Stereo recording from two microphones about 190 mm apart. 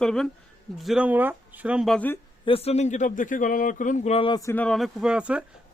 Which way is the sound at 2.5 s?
30° left (ahead or behind).